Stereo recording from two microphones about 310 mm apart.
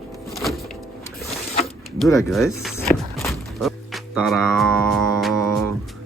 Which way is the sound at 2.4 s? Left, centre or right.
Centre.